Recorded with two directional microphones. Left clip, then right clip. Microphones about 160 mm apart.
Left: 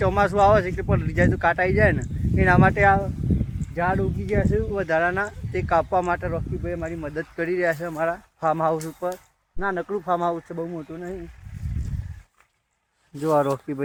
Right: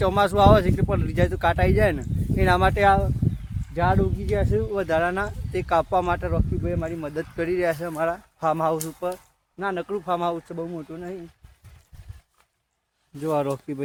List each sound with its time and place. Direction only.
0.0 s speech: 10° right (ahead or behind)
8.9 s speech: 25° left (ahead or behind)
13.4 s speech: 10° left (ahead or behind)